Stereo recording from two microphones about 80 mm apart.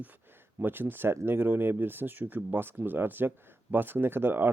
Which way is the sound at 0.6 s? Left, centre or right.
Right.